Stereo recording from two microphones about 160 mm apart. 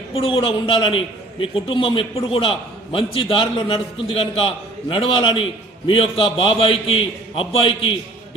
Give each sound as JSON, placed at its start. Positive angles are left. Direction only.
{"t": 0.1, "sound": "a man's voice", "side_deg": 35}